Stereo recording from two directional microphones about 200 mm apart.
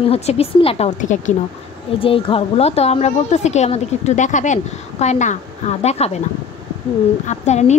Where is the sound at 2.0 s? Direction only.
25° left (ahead or behind).